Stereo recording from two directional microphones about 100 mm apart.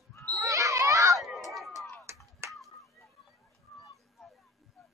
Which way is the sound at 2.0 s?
30° right (ahead or behind).